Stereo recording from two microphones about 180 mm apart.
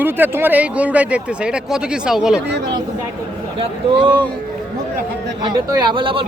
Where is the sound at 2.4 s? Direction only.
70° right (ahead or behind).